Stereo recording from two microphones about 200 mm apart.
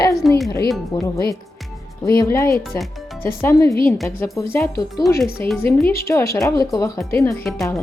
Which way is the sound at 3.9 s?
Centre (ahead or behind).